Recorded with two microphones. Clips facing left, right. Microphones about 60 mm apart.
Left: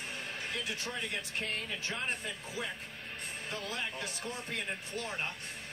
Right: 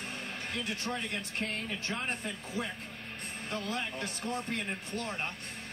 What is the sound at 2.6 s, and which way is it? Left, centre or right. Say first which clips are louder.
Speech: right 3 dB; right.